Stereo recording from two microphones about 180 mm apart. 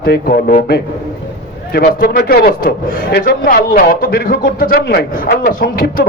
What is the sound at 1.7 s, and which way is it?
A man's voice, 55° left (ahead or behind).